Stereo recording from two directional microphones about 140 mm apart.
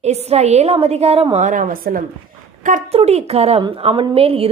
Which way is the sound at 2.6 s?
65° right (ahead or behind).